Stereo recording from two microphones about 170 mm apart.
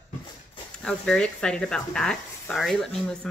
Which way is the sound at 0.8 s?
5° left (ahead or behind).